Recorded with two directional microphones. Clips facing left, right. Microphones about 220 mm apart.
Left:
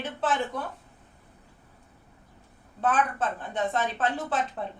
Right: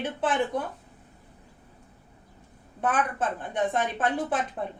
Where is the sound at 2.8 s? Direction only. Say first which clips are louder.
Left 1 dB; 15° right (ahead or behind).